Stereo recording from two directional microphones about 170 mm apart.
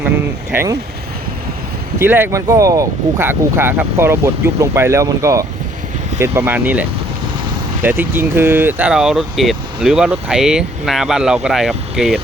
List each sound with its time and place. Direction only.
0.5 s speech: 15° right (ahead or behind)
2.0 s speech: 15° right (ahead or behind)